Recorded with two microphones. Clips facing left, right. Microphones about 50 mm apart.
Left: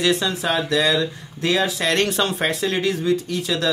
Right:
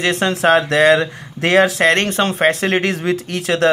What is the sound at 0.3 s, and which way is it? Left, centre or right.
Speech, right.